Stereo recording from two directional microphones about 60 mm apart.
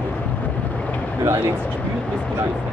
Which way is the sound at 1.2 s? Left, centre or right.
Right.